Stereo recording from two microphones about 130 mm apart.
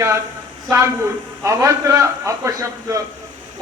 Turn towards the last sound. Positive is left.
turn(degrees=-25)  # may be behind; listen again after turning